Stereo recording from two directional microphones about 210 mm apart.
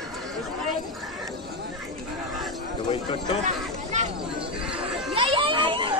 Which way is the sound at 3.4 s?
35° right (ahead or behind).